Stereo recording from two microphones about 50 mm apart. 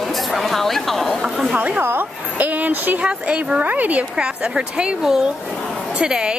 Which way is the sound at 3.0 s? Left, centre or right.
Right.